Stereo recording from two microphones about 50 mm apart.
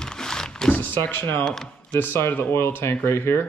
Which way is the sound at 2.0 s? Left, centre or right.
Left.